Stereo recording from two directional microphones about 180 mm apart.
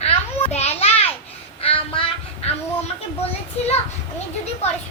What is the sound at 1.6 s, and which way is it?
Child singing, 30° left (ahead or behind).